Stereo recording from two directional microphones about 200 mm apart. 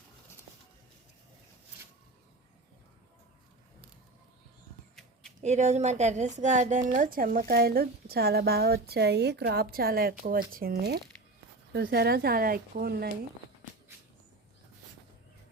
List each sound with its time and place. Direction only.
5.4 s a woman's voice: 35° right (ahead or behind); by 13.1 s 50° right (ahead or behind)